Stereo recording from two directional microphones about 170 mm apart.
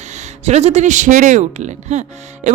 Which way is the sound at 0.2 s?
40° right (ahead or behind).